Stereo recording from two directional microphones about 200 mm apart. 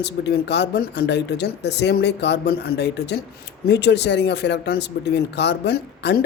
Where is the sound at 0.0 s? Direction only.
55° left (ahead or behind).